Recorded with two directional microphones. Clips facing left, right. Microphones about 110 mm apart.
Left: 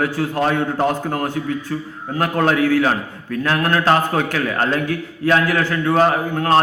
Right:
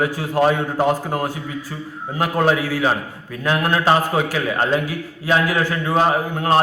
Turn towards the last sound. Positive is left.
turn(degrees=-15)  # may be behind; listen again after turning